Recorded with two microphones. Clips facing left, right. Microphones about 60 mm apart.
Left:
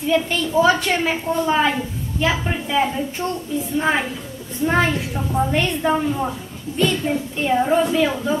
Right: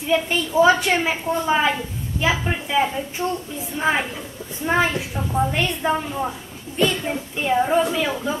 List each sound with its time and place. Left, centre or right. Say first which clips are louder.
0.0 s a woman's voice: left 1 dB; centre